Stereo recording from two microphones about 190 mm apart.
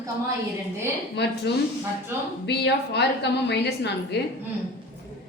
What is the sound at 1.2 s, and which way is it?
Speech, 65° left (ahead or behind).